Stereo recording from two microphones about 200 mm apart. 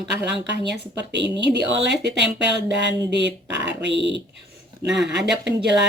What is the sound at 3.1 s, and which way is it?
Speech, 60° right (ahead or behind).